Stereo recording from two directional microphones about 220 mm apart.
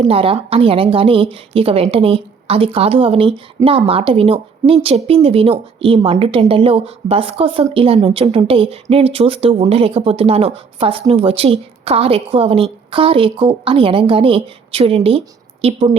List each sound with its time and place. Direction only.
0.0 s a woman's voice: 25° right (ahead or behind)